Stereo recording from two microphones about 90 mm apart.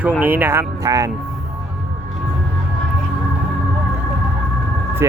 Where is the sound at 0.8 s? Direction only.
40° right (ahead or behind).